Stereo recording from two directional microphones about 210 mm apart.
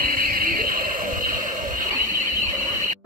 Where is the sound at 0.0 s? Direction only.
40° right (ahead or behind).